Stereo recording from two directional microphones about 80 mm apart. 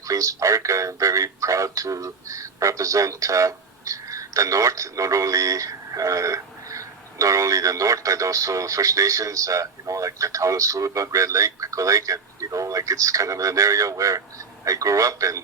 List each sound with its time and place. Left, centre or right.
0.0 s speech: right